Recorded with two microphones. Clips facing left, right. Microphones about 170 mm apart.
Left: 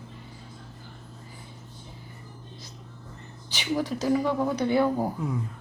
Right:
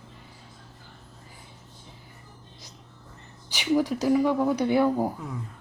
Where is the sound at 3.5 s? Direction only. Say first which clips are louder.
Right 4 dB; 10° right (ahead or behind).